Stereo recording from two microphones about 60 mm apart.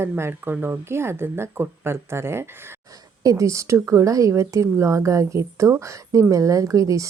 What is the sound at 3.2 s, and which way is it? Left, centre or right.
Speech, right.